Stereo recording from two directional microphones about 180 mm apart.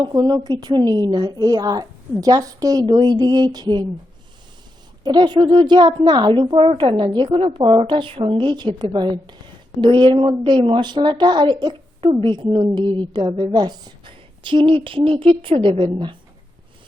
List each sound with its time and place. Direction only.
0.0 s speech: 25° right (ahead or behind)
5.0 s speech: 25° right (ahead or behind)